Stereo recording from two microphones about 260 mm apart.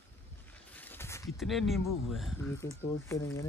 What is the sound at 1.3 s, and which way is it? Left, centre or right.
Speech, centre.